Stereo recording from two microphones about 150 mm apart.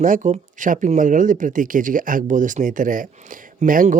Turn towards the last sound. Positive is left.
turn(degrees=-65)  # may be behind; listen again after turning